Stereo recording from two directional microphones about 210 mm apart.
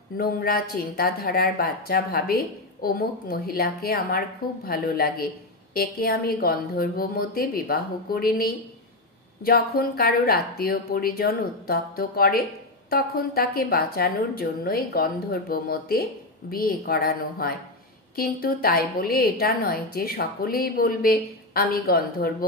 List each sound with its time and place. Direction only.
0.2 s a woman's voice: 45° left (ahead or behind)